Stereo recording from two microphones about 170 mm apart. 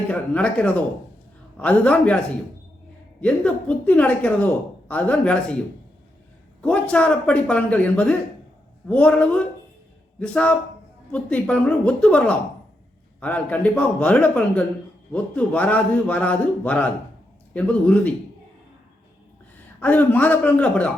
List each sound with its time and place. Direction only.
0.1 s a woman's voice: 5° left (ahead or behind)
3.2 s a woman's voice: 5° left (ahead or behind)
6.6 s a woman's voice: 5° left (ahead or behind)
19.8 s a woman's voice: 10° left (ahead or behind)